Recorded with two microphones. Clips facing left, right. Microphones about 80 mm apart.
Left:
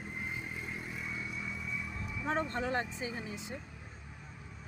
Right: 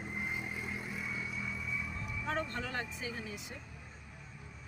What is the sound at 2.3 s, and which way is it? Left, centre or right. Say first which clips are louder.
Speech: left 4 dB; left.